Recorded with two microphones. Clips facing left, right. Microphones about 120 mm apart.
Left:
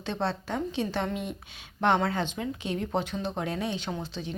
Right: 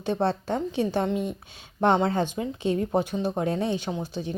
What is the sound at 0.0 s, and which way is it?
A woman's voice, 15° right (ahead or behind).